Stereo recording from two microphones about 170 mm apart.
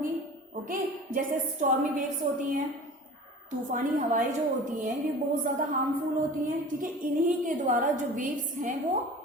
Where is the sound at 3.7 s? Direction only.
50° right (ahead or behind).